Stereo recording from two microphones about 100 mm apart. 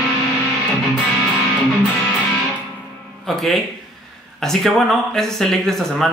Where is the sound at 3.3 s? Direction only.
Centre (ahead or behind).